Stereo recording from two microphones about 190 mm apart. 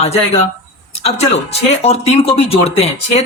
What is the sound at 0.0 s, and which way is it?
Speech, 35° left (ahead or behind).